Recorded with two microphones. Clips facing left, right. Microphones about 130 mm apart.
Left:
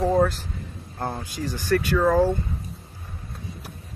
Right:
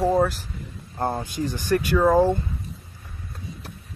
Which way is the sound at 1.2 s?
20° right (ahead or behind).